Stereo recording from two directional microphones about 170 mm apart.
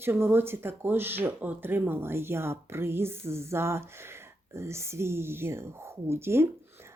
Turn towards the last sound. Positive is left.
turn(degrees=-15)  # may be behind; listen again after turning